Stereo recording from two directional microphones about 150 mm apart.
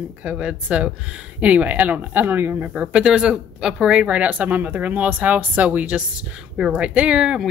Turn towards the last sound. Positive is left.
turn(degrees=-5)  # may be behind; listen again after turning